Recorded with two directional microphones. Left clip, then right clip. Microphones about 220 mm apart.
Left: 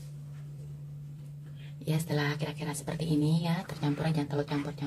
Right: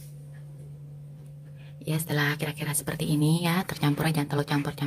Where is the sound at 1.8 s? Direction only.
20° right (ahead or behind).